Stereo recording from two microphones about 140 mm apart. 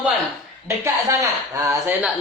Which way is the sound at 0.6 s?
20° right (ahead or behind).